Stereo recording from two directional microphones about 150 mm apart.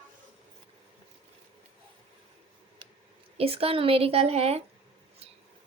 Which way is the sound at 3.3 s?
40° right (ahead or behind).